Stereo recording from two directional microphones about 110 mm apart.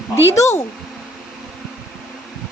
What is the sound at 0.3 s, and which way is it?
Speech, 25° left (ahead or behind).